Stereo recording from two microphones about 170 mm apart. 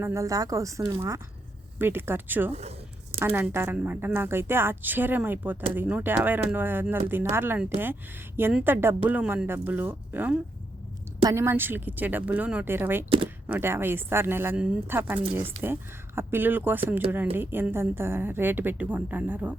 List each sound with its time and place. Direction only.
0.0 s a woman's voice: 20° right (ahead or behind)